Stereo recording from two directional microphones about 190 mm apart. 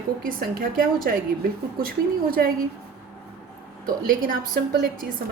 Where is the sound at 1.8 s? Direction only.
50° right (ahead or behind).